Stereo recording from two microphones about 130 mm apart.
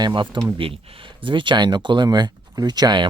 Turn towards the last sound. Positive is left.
turn(degrees=-35)  # may be behind; listen again after turning